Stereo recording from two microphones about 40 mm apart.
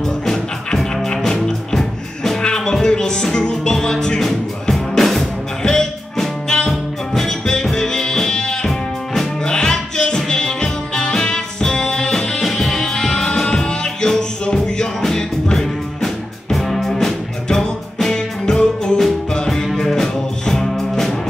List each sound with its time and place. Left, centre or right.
0.0 s music: centre
8.6 s music: centre
9.4 s music: centre